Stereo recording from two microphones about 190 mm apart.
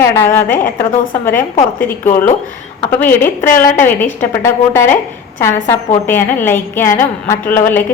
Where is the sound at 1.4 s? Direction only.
45° left (ahead or behind).